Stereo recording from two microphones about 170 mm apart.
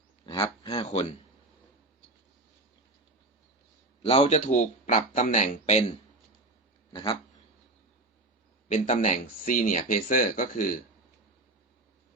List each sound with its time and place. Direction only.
0.3 s speech: 30° left (ahead or behind)
4.0 s speech: 40° left (ahead or behind)
6.9 s a sound: 30° left (ahead or behind)
8.7 s speech: 45° left (ahead or behind)